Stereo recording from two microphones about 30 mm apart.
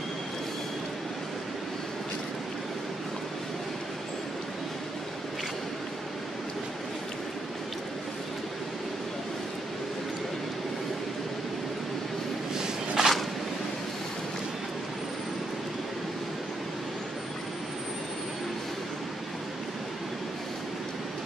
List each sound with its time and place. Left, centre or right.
12.5 s walk: centre